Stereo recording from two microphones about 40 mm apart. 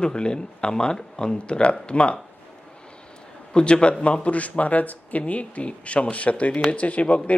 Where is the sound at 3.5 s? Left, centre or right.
Left.